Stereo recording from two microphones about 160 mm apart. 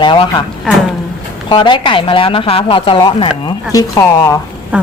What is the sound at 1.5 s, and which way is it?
A woman's voice, 30° left (ahead or behind).